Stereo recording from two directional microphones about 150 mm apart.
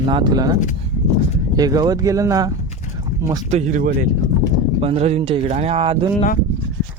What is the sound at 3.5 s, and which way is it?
Speech, 60° right (ahead or behind).